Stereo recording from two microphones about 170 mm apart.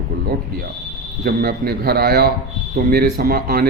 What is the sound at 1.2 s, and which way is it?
A man's voice, 70° right (ahead or behind).